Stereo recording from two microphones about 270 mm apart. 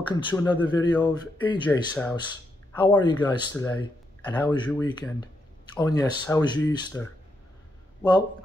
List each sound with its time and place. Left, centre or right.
0.1 s speech: centre
1.7 s speech: centre
2.8 s speech: centre